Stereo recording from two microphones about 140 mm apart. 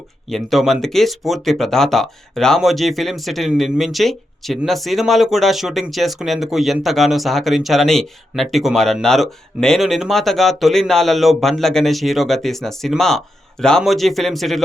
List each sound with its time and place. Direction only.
0.3 s speech: centre (ahead or behind)